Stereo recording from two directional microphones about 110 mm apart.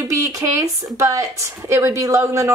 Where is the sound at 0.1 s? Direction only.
25° right (ahead or behind).